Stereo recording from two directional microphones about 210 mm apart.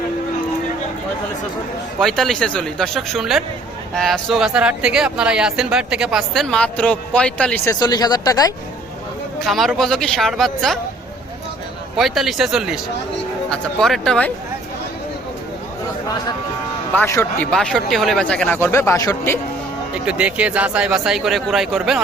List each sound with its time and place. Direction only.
2.0 s speech: centre (ahead or behind)
7.7 s speech: 20° left (ahead or behind)
9.4 s speech: centre (ahead or behind)
11.9 s speech: centre (ahead or behind)
16.9 s speech: 10° left (ahead or behind)
20.1 s speech: 5° right (ahead or behind)